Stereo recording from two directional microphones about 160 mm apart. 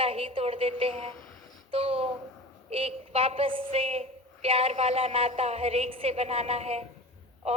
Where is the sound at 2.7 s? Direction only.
35° right (ahead or behind).